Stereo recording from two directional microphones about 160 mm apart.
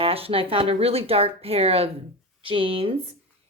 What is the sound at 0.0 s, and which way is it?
A woman's voice, 35° right (ahead or behind).